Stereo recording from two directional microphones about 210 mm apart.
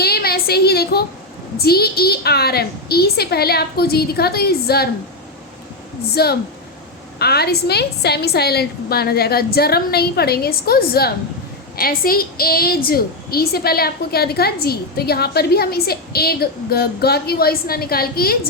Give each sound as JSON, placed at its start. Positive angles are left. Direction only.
{"t": 0.0, "sound": "a sound", "side_deg": 50}
{"t": 1.5, "sound": "a woman's voice", "side_deg": 50}
{"t": 6.2, "sound": "a woman's voice", "side_deg": 50}